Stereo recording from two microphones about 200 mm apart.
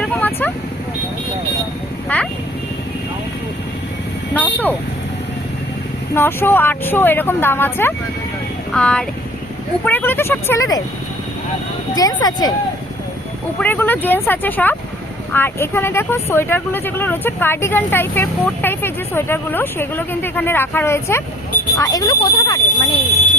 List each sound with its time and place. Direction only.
0.0 s vehicle: 5° left (ahead or behind)
2.1 s speech: 10° left (ahead or behind)
4.4 s vehicle: 10° left (ahead or behind)
6.1 s speech: 10° left (ahead or behind)
8.7 s vehicle: 5° left (ahead or behind)
9.8 s speech: 10° left (ahead or behind)
11.9 s speech: 20° left (ahead or behind)
13.6 s speech: 10° left (ahead or behind)